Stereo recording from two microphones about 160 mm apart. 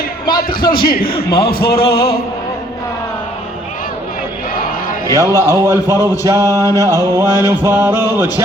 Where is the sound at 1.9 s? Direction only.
75° left (ahead or behind).